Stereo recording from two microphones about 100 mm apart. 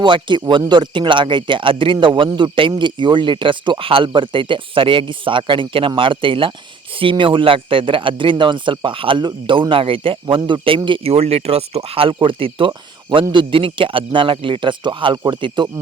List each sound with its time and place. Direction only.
0.0 s a man's voice: 50° right (ahead or behind)